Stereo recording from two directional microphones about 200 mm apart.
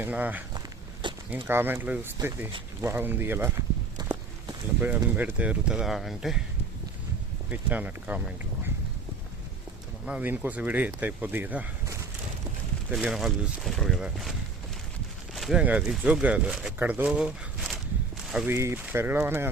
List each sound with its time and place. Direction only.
0.0 s speech: 10° right (ahead or behind)
1.0 s a sound: 25° right (ahead or behind)
1.5 s speech: 10° right (ahead or behind)
7.5 s speech: 10° right (ahead or behind)
10.1 s speech: 10° right (ahead or behind)
15.4 s speech: centre (ahead or behind)